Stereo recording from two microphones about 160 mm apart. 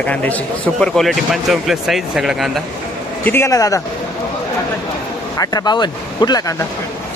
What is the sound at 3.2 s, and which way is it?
Speech, 15° left (ahead or behind).